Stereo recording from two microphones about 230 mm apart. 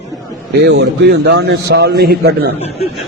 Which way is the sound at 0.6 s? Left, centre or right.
Right.